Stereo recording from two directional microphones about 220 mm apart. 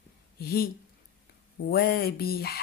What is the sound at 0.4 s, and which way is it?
Speech, 45° left (ahead or behind).